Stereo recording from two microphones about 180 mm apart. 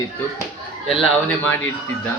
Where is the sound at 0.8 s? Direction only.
Centre (ahead or behind).